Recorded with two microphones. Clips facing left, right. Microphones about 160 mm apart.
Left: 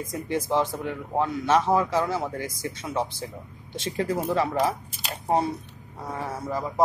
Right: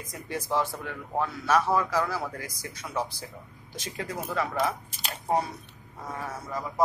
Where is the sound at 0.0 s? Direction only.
20° left (ahead or behind).